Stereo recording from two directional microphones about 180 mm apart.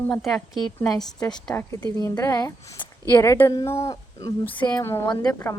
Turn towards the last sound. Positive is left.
turn(degrees=20)  # may be behind; listen again after turning